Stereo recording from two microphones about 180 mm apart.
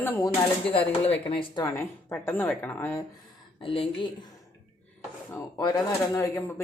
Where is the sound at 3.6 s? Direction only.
30° left (ahead or behind).